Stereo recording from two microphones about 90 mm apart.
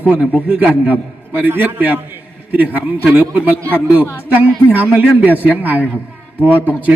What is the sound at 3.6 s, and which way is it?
Speech, 20° left (ahead or behind).